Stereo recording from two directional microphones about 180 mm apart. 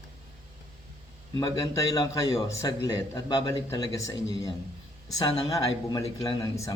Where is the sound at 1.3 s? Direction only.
20° left (ahead or behind).